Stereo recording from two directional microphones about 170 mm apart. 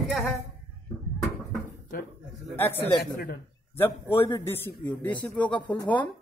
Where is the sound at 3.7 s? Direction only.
15° left (ahead or behind).